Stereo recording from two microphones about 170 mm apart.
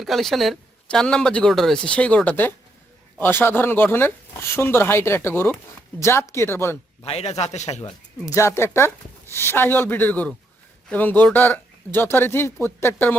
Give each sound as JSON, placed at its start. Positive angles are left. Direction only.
{"t": 0.0, "sound": "speech", "side_deg": 0}
{"t": 7.0, "sound": "a man's voice", "side_deg": 35}
{"t": 7.8, "sound": "speech", "side_deg": 20}